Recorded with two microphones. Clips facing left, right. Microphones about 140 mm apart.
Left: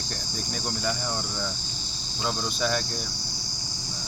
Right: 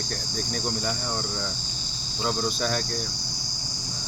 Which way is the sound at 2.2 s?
Centre (ahead or behind).